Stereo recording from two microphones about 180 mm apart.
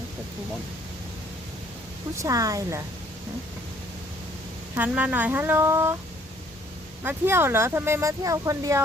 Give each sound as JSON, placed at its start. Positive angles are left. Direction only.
{"t": 2.1, "sound": "speech", "side_deg": -20}
{"t": 4.7, "sound": "speech", "side_deg": -10}
{"t": 7.0, "sound": "speech", "side_deg": -10}